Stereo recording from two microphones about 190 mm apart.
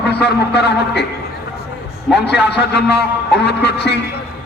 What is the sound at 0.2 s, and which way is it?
Speech, 60° left (ahead or behind).